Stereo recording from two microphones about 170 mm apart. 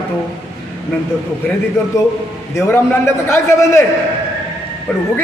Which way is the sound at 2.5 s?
15° left (ahead or behind).